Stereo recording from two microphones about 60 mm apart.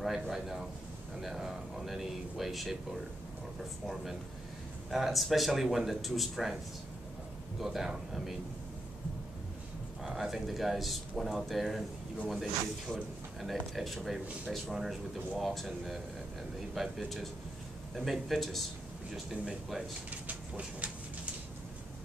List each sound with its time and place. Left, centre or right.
0.0 s speech: centre
3.8 s speech: centre
7.6 s speech: centre
10.0 s speech: centre
20.1 s a sound: right